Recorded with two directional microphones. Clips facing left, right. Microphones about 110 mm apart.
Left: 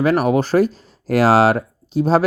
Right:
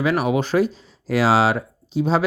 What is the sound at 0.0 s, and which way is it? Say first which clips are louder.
Speech: left 4 dB; 45° left (ahead or behind).